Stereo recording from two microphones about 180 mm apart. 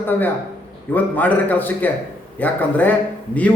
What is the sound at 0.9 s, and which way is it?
A man's voice, 10° left (ahead or behind).